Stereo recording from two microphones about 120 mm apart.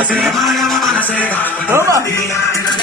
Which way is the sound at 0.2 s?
Centre (ahead or behind).